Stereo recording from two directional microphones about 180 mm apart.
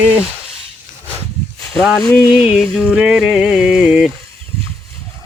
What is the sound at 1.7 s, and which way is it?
Music, centre (ahead or behind).